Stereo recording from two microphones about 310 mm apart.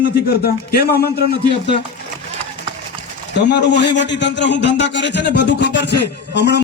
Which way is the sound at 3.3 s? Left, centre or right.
Left.